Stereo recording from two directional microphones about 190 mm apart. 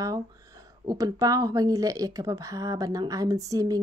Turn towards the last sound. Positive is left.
turn(degrees=-20)  # may be behind; listen again after turning